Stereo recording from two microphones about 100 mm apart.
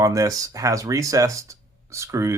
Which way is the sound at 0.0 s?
35° right (ahead or behind).